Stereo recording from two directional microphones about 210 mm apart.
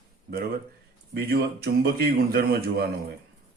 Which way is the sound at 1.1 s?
50° right (ahead or behind).